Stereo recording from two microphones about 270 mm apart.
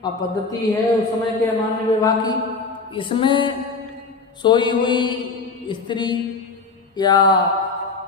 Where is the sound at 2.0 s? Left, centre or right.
Centre.